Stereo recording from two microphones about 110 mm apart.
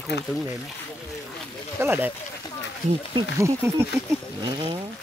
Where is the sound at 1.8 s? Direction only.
20° right (ahead or behind).